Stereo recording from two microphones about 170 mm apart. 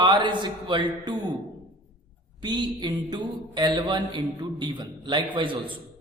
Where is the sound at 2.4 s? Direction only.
25° right (ahead or behind).